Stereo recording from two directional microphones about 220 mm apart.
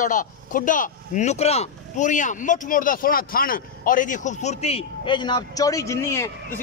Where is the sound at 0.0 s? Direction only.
35° left (ahead or behind).